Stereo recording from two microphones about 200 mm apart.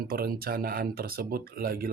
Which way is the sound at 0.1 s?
50° right (ahead or behind).